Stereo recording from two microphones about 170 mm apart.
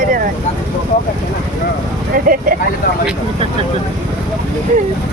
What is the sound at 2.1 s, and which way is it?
Vehicle, 55° right (ahead or behind).